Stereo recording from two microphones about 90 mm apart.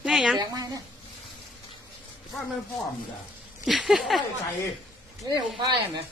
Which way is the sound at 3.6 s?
Centre (ahead or behind).